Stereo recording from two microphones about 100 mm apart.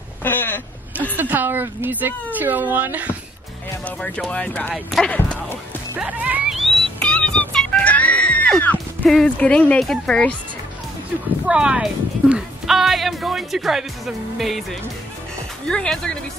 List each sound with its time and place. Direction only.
0.2 s a sound: 20° left (ahead or behind)
1.1 s speech: 20° right (ahead or behind)
3.8 s speech: 15° left (ahead or behind)
4.7 s speech: centre (ahead or behind)
5.9 s speech: 15° right (ahead or behind)
6.5 s music: centre (ahead or behind)
8.6 s speech: 10° left (ahead or behind)
11.4 s speech: 10° right (ahead or behind); by 16.2 s 10° left (ahead or behind)